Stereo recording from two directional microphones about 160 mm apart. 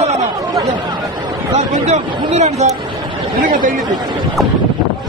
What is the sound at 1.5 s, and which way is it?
A man's voice, 50° right (ahead or behind).